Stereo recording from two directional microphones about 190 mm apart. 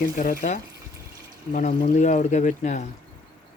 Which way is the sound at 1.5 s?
40° left (ahead or behind).